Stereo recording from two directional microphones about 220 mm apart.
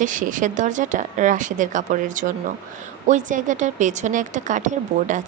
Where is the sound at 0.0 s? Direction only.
35° right (ahead or behind).